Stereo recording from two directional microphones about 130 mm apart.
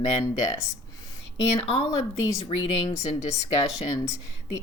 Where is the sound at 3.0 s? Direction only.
65° left (ahead or behind).